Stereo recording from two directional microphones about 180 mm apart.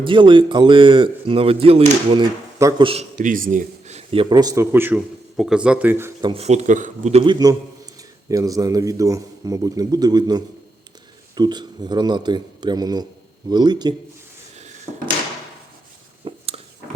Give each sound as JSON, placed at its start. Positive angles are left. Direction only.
{"t": 0.0, "sound": "a man's voice", "side_deg": -25}
{"t": 2.6, "sound": "a man's voice", "side_deg": -20}
{"t": 2.8, "sound": "a man's voice", "side_deg": -35}
{"t": 3.2, "sound": "speech", "side_deg": -50}
{"t": 6.2, "sound": "a man's voice", "side_deg": -35}
{"t": 16.2, "sound": "a sound", "side_deg": -30}